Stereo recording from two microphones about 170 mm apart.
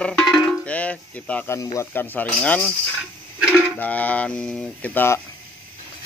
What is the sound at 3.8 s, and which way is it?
Speech, 10° left (ahead or behind).